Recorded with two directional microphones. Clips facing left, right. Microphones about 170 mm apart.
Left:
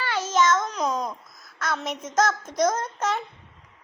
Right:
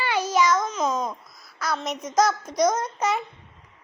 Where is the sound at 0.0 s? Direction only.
15° right (ahead or behind).